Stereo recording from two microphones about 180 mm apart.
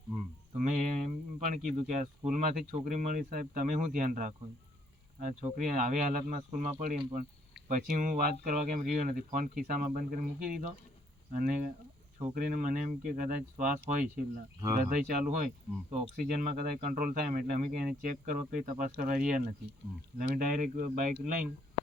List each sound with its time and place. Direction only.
0.5 s speech: 45° right (ahead or behind)